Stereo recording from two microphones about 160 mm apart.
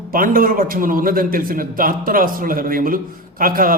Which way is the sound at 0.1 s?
60° right (ahead or behind).